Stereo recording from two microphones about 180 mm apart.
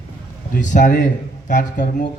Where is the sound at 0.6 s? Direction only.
45° left (ahead or behind).